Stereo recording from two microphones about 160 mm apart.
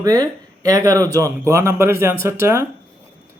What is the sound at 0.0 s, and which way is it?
A man's voice, 20° right (ahead or behind).